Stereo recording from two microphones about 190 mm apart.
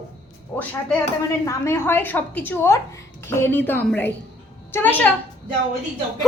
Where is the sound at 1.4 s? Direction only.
15° left (ahead or behind).